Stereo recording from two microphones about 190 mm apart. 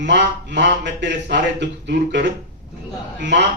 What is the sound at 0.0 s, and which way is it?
A man's voice, 65° right (ahead or behind).